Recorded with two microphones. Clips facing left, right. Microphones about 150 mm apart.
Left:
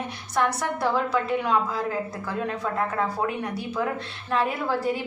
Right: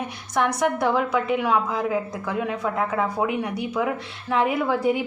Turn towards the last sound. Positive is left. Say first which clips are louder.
# right 4 dB
turn(degrees=-20)  # may be behind; listen again after turning